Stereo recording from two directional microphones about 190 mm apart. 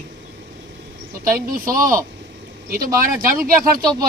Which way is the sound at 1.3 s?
50° right (ahead or behind).